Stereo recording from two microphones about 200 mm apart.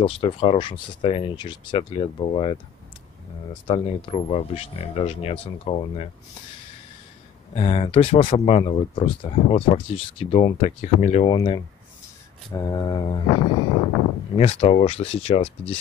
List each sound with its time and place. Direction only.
0.0 s speech: 30° left (ahead or behind)
3.6 s speech: 25° left (ahead or behind)
7.5 s speech: 30° left (ahead or behind)
14.3 s speech: 30° left (ahead or behind)